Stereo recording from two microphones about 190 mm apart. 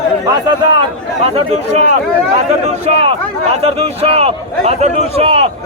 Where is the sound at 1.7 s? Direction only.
35° right (ahead or behind).